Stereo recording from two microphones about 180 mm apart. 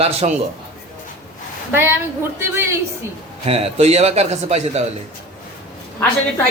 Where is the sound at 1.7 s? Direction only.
10° right (ahead or behind).